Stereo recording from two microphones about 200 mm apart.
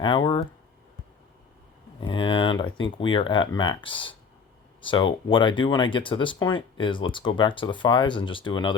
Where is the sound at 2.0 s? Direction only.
25° left (ahead or behind).